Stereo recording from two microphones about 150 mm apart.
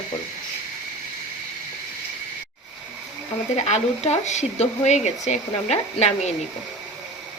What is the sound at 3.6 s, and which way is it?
Speech, 50° left (ahead or behind).